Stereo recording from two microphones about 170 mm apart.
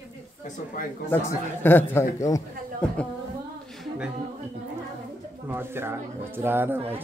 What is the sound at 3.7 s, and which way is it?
A capella, centre (ahead or behind).